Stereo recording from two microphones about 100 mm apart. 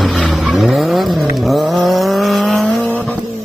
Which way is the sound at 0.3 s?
Centre (ahead or behind).